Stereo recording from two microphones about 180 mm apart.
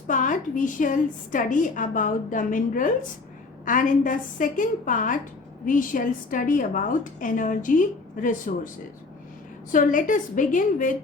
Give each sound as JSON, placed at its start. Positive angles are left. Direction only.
{"t": 0.1, "sound": "a woman's voice", "side_deg": 45}
{"t": 9.7, "sound": "a woman's voice", "side_deg": 45}